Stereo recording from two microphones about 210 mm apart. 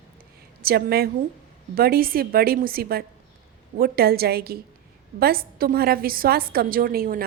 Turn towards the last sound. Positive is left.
turn(degrees=-45)  # may be behind; listen again after turning